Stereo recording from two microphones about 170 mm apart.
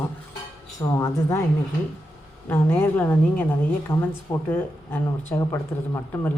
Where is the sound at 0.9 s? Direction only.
15° left (ahead or behind).